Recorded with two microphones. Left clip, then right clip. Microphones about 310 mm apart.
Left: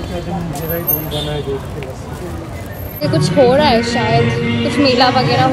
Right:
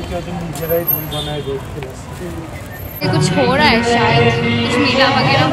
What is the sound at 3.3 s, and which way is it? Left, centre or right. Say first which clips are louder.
Speech: left 3 dB; centre.